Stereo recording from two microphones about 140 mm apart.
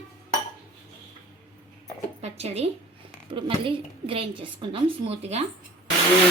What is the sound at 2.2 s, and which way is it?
Speech, 50° right (ahead or behind).